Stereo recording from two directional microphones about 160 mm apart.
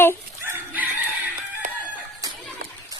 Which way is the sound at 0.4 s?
10° right (ahead or behind).